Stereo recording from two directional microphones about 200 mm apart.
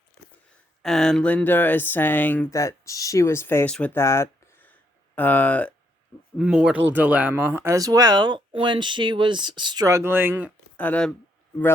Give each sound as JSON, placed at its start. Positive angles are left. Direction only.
{"t": 0.8, "sound": "speech", "side_deg": 0}
{"t": 6.3, "sound": "speech", "side_deg": -5}
{"t": 10.8, "sound": "speech", "side_deg": 5}